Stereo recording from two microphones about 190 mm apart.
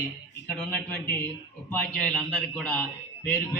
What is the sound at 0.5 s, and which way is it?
A man's voice, 5° left (ahead or behind).